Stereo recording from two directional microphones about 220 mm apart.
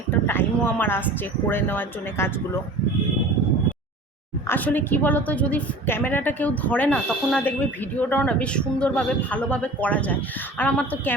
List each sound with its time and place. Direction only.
0.3 s a woman's voice: 10° left (ahead or behind)
4.4 s a woman's voice: 10° left (ahead or behind)